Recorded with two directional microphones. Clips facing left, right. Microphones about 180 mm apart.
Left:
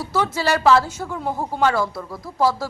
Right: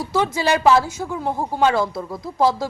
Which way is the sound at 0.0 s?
15° right (ahead or behind).